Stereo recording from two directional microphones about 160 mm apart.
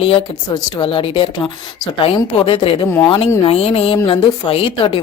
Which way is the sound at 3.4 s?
40° left (ahead or behind).